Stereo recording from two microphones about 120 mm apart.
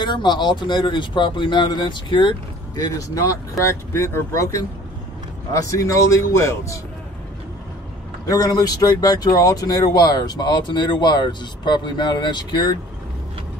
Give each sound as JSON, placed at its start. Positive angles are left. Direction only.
{"t": 0.0, "sound": "speech", "side_deg": 40}
{"t": 8.3, "sound": "speech", "side_deg": 30}